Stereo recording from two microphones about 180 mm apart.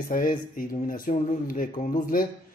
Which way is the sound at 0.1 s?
50° left (ahead or behind).